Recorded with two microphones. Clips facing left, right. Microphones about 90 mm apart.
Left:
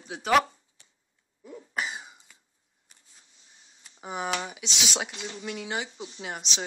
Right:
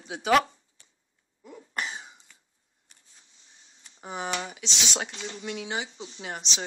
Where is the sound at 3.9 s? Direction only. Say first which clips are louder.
Left 1 dB; 5° left (ahead or behind).